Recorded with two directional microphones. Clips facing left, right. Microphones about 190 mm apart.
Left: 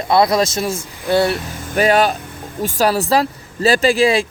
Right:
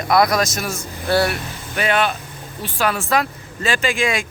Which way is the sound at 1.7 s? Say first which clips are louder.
Left 5 dB; 40° left (ahead or behind).